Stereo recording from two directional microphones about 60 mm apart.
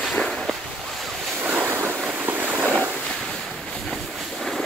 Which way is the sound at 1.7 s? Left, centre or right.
Right.